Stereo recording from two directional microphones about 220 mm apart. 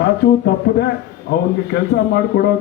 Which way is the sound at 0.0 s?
50° left (ahead or behind).